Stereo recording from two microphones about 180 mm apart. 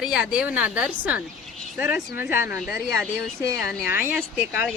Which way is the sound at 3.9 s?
10° right (ahead or behind).